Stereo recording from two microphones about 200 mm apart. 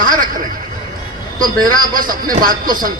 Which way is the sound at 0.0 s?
45° right (ahead or behind).